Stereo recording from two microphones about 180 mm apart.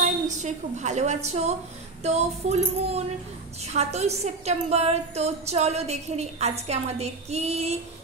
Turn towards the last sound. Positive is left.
turn(degrees=-35)  # may be behind; listen again after turning